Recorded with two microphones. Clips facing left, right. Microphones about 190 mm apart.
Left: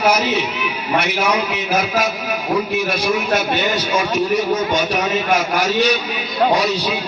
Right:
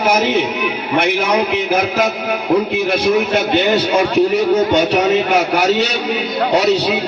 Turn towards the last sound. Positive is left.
turn(degrees=-65)  # may be behind; listen again after turning